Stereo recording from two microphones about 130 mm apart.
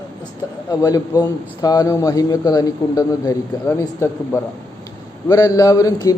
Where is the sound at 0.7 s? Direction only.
30° left (ahead or behind).